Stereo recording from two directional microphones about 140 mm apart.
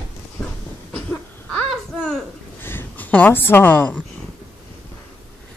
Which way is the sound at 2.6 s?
15° left (ahead or behind).